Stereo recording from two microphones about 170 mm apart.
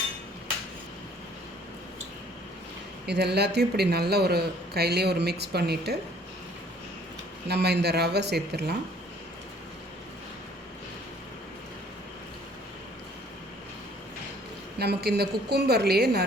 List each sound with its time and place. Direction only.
3.1 s speech: 75° right (ahead or behind)
7.4 s speech: 75° right (ahead or behind)
14.8 s speech: 70° right (ahead or behind)